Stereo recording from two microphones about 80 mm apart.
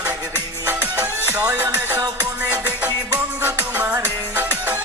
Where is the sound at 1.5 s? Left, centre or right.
Centre.